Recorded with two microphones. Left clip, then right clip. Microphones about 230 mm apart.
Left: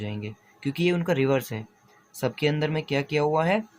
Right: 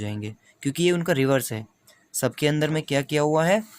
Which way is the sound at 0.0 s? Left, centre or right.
Right.